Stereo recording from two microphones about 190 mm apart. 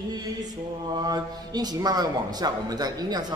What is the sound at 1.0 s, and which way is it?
A man's voice, 20° right (ahead or behind).